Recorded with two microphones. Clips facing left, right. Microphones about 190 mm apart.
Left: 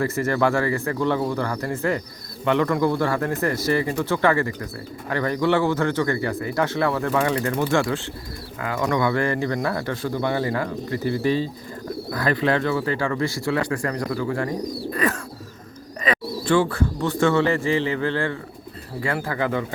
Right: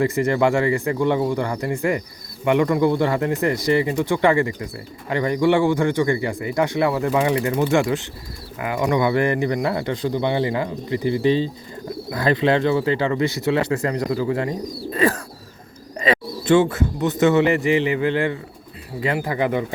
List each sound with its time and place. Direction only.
0.0 s speech: 15° right (ahead or behind)